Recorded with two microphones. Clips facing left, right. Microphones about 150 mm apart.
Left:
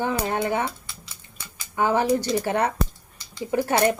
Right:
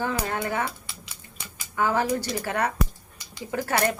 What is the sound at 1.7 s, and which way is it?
Speech, 20° left (ahead or behind).